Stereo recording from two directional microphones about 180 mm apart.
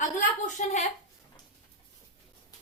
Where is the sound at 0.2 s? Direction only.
40° left (ahead or behind).